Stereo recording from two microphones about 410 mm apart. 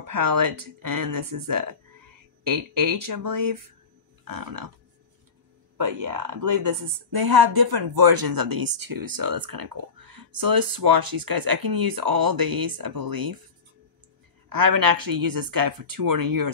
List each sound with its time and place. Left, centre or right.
0.0 s speech: right
4.2 s a sound: right
5.8 s speech: right
14.5 s speech: right